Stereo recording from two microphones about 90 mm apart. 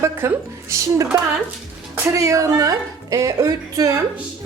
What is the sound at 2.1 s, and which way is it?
Speech, 40° right (ahead or behind).